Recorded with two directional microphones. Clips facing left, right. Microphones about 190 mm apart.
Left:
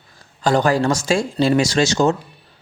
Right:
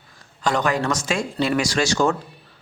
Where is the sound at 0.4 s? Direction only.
35° left (ahead or behind).